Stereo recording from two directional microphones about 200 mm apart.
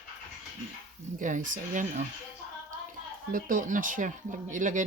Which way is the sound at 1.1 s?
40° right (ahead or behind).